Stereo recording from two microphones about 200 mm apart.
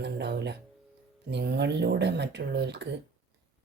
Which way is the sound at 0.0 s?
60° right (ahead or behind).